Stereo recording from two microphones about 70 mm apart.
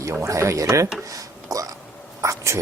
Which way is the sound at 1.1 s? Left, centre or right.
Right.